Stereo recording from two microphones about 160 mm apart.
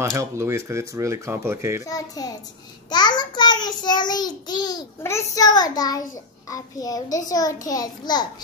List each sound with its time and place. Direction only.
0.0 s speech: 20° right (ahead or behind)
1.9 s a child's voice: 20° left (ahead or behind)